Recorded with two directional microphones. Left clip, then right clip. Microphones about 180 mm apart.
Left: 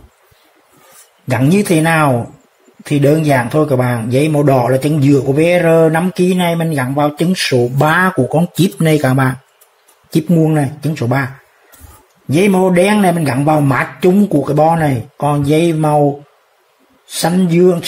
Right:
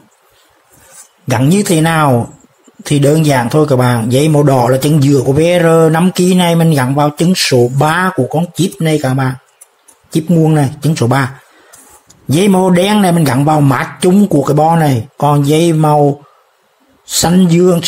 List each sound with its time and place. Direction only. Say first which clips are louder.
1.3 s speech: right 1 dB; 15° right (ahead or behind)
7.7 s speech: even; centre (ahead or behind); by 11.2 s 20° right (ahead or behind)
12.3 s speech: right 1 dB; 20° right (ahead or behind)
17.1 s speech: right 3 dB; 15° right (ahead or behind)